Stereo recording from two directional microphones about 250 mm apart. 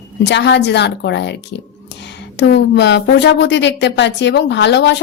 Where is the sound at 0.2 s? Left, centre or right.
Left.